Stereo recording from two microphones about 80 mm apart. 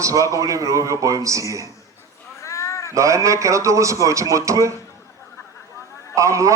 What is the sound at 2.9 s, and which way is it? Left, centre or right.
A man's voice, right.